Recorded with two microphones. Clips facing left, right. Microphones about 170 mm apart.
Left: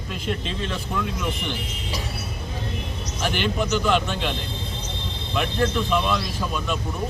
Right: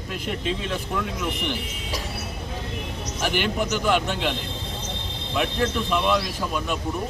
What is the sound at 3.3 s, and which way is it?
Speech, 10° right (ahead or behind).